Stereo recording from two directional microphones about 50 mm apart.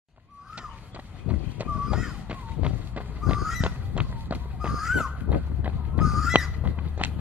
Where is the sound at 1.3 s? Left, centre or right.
Right.